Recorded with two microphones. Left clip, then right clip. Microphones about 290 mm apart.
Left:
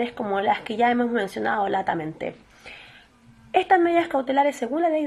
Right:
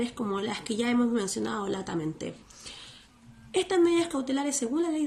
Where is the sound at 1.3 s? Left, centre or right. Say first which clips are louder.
Left 8 dB; centre.